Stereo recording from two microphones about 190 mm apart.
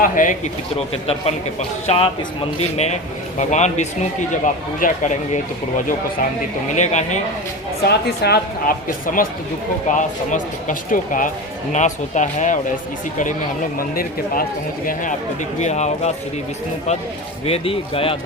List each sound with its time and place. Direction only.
0.0 s speech: 45° left (ahead or behind)
1.5 s a man's voice: 30° left (ahead or behind)
7.9 s a man's voice: 60° left (ahead or behind); by 12.5 s 40° left (ahead or behind)
13.7 s speech: 50° left (ahead or behind)
15.5 s a man's voice: 35° left (ahead or behind)
17.4 s speech: 30° left (ahead or behind)